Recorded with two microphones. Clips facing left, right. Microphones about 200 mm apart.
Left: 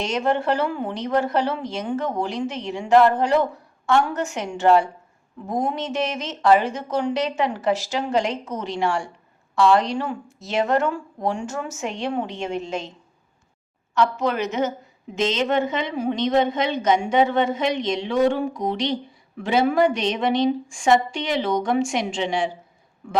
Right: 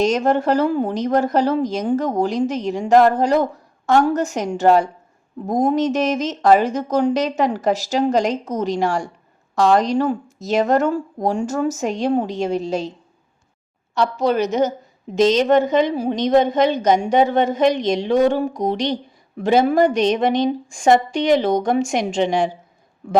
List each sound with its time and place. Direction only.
0.0 s a woman's voice: 40° right (ahead or behind)
13.9 s a woman's voice: 35° right (ahead or behind)